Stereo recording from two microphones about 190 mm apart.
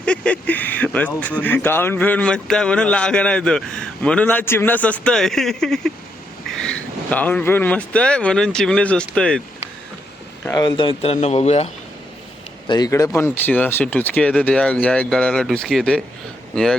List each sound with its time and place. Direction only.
0.0 s speech: 5° left (ahead or behind)
10.4 s speech: 20° left (ahead or behind)
12.6 s speech: 20° left (ahead or behind); by 16.0 s centre (ahead or behind)